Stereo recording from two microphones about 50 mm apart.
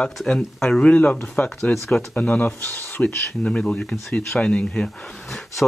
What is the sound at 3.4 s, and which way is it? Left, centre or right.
Speech, left.